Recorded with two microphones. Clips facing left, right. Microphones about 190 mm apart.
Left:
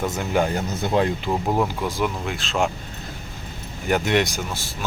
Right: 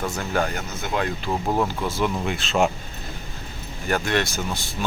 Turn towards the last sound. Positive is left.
turn(degrees=5)  # may be behind; listen again after turning